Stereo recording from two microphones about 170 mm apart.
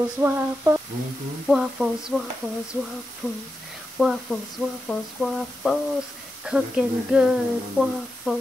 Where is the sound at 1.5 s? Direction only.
Centre (ahead or behind).